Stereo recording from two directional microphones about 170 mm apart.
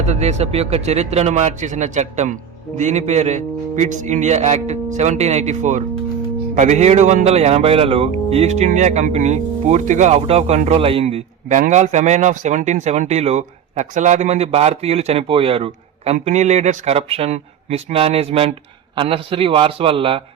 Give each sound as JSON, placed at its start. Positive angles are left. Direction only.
{"t": 0.0, "sound": "a man's voice", "side_deg": -40}